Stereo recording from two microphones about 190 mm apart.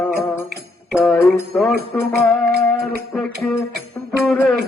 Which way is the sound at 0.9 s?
Centre (ahead or behind).